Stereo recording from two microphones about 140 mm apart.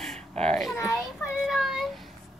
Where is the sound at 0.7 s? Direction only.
20° left (ahead or behind).